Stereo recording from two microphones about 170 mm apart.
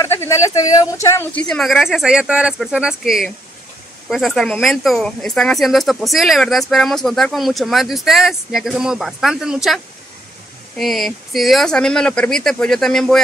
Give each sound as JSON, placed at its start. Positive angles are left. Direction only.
{"t": 0.0, "sound": "speech", "side_deg": 15}
{"t": 1.5, "sound": "speech", "side_deg": 0}
{"t": 10.8, "sound": "speech", "side_deg": 0}